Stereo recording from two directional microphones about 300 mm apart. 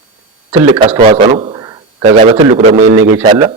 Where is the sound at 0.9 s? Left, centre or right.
Centre.